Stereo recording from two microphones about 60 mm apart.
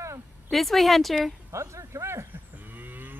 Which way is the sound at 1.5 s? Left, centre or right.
Right.